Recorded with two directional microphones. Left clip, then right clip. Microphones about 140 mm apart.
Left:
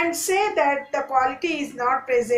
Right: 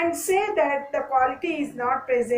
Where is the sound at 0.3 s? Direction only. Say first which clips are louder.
Left 2 dB; 30° left (ahead or behind).